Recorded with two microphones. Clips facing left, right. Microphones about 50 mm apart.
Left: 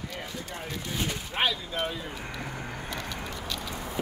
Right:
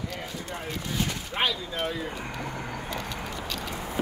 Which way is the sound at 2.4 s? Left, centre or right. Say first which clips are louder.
Right 2 dB; centre.